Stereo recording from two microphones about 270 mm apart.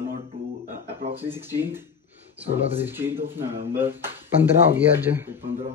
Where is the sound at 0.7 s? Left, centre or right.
Right.